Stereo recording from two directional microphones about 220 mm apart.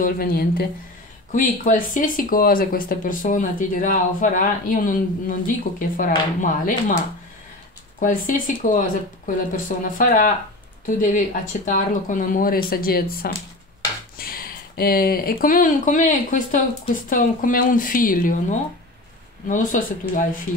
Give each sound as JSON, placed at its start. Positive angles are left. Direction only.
{"t": 0.0, "sound": "speech", "side_deg": 40}
{"t": 8.3, "sound": "speech", "side_deg": 35}